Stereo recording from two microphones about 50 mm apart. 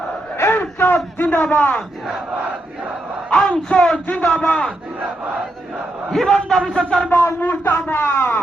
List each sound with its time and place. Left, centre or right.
0.3 s a sound: left
3.2 s a man's voice: centre
6.1 s a man's voice: centre
7.4 s a man's voice: left